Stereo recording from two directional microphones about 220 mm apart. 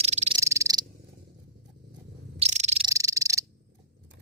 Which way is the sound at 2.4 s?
30° right (ahead or behind).